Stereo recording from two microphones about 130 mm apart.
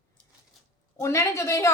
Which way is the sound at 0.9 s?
25° left (ahead or behind).